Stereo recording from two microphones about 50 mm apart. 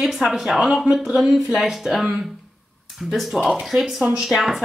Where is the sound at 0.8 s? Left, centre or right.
Centre.